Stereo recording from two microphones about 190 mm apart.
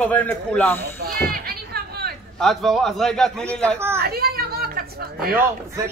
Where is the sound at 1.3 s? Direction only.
55° right (ahead or behind).